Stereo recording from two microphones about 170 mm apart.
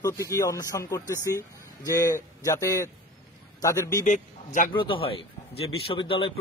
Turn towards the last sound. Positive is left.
turn(degrees=30)  # may be behind; listen again after turning